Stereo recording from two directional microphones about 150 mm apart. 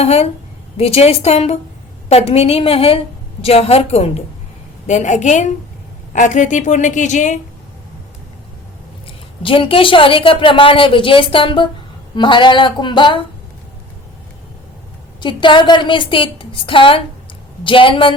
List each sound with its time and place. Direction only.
0.0 s a woman's voice: 45° left (ahead or behind)
9.4 s a woman's voice: 35° left (ahead or behind)
15.2 s a woman's voice: 30° left (ahead or behind)